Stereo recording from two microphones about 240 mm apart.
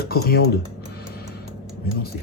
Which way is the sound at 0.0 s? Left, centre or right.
Left.